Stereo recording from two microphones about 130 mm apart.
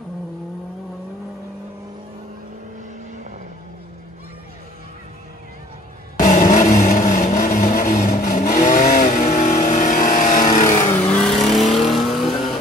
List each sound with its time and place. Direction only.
6.2 s vehicle: 75° left (ahead or behind)
7.5 s vehicle: 85° left
11.1 s vehicle: 10° left (ahead or behind)